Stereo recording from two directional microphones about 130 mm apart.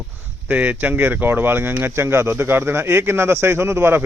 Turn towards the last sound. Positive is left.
turn(degrees=-20)  # may be behind; listen again after turning